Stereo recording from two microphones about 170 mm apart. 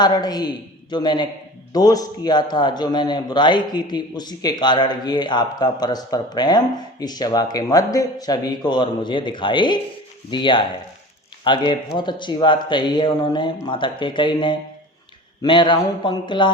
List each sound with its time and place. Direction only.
0.0 s a man's voice: 25° left (ahead or behind)